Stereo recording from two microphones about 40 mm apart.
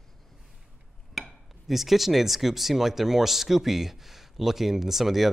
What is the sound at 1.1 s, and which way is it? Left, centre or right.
Speech, centre.